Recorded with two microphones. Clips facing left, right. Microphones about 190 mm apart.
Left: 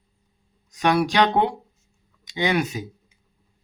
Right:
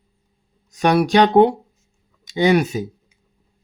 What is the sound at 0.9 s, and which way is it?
Speech, 35° right (ahead or behind).